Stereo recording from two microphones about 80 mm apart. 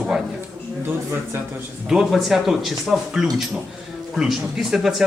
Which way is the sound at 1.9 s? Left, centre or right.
Centre.